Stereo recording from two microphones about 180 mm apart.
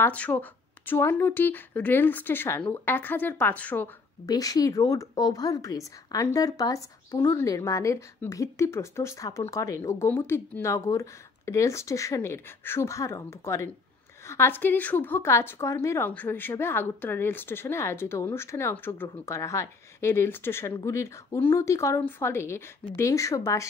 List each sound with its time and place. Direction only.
0.0 s a woman's voice: 10° left (ahead or behind)
4.3 s a woman's voice: 20° left (ahead or behind)